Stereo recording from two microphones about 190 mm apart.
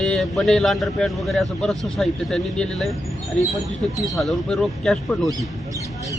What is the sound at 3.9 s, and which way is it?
A man's voice, centre (ahead or behind).